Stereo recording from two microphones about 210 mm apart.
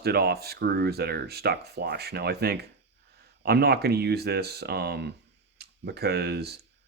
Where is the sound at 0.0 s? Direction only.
50° right (ahead or behind).